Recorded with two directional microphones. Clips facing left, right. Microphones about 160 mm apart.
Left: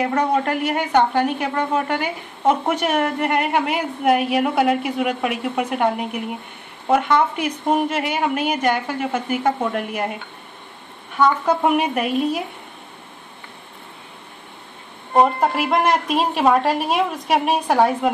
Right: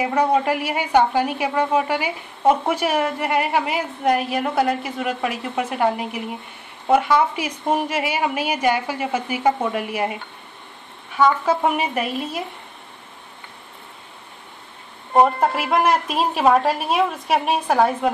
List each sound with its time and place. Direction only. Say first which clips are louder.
0.0 s a woman's voice: right 1 dB; 10° right (ahead or behind)
11.1 s a woman's voice: even; centre (ahead or behind)
15.1 s a woman's voice: even; centre (ahead or behind)